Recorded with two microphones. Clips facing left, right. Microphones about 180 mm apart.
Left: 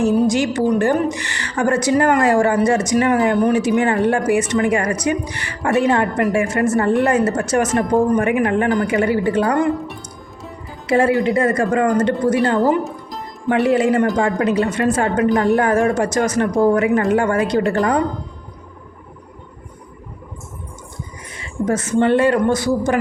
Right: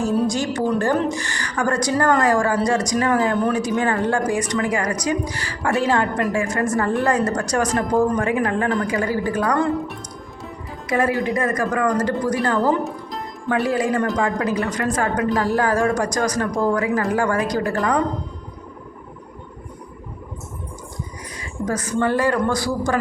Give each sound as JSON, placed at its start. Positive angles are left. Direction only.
{"t": 0.3, "sound": "a woman's voice", "side_deg": 20}
{"t": 10.8, "sound": "a woman's voice", "side_deg": 30}
{"t": 12.8, "sound": "music", "side_deg": 0}
{"t": 13.5, "sound": "a woman's voice", "side_deg": 25}
{"t": 21.3, "sound": "a woman's voice", "side_deg": 25}